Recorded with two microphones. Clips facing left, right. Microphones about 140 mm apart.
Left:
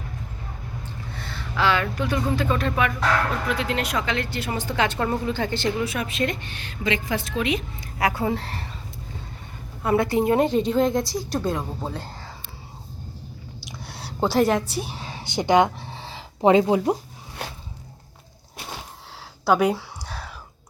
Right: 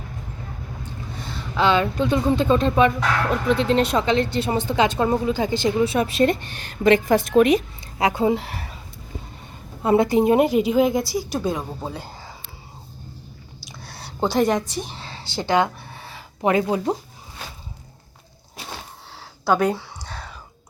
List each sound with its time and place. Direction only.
1.1 s speech: 15° right (ahead or behind)
5.8 s a woman's voice: 30° right (ahead or behind); by 7.6 s 45° right (ahead or behind)
7.8 s speech: 20° right (ahead or behind)
9.8 s a woman's voice: 20° right (ahead or behind); by 12.3 s 5° right (ahead or behind)
13.8 s a woman's voice: 5° left (ahead or behind)
17.4 s a sound: 65° left (ahead or behind)
19.5 s a sound: 5° left (ahead or behind)